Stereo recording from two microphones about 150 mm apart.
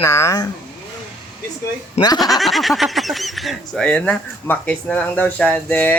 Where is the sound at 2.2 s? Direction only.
Centre (ahead or behind).